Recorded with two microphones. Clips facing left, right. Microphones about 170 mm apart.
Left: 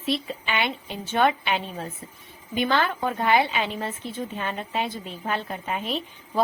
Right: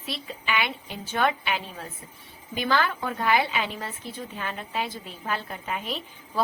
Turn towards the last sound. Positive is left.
turn(degrees=25)  # may be behind; listen again after turning